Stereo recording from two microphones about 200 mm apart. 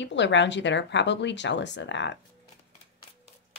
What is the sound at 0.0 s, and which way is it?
Speech, 65° left (ahead or behind).